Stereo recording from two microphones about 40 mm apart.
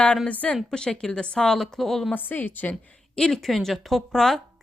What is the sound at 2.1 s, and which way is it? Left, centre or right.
Speech, left.